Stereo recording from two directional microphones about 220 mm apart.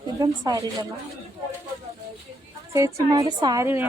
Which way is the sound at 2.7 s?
15° right (ahead or behind).